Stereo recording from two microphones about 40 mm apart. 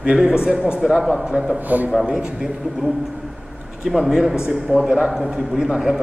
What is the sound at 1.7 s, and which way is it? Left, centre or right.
Speech, right.